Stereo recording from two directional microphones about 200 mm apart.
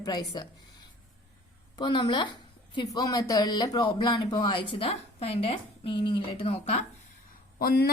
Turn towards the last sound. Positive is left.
turn(degrees=50)  # may be behind; listen again after turning